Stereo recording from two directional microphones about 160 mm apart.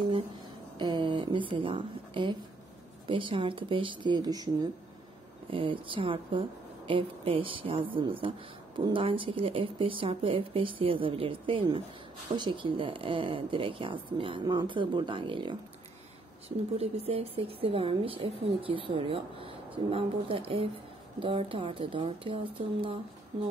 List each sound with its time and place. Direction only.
0.7 s a woman's voice: 30° right (ahead or behind)